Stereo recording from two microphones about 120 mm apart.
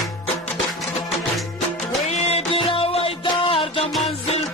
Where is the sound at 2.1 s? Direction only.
60° left (ahead or behind).